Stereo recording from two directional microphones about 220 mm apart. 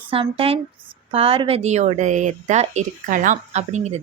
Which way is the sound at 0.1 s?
25° right (ahead or behind).